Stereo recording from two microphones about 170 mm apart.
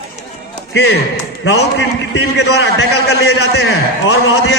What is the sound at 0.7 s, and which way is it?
A man's voice, 85° left.